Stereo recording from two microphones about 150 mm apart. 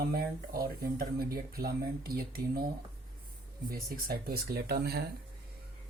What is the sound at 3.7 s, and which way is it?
Speech, 85° right.